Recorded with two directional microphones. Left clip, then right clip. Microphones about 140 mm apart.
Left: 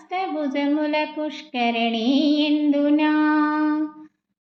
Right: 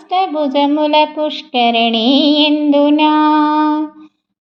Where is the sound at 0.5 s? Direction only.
30° right (ahead or behind).